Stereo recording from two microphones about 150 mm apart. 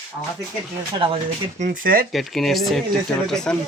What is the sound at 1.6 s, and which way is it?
Speech, 70° right (ahead or behind).